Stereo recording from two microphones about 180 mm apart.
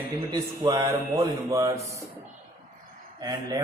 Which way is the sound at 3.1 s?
20° right (ahead or behind).